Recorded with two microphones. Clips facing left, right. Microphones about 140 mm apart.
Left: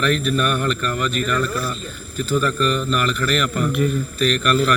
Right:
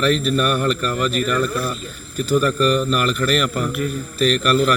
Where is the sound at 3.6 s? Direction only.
5° right (ahead or behind).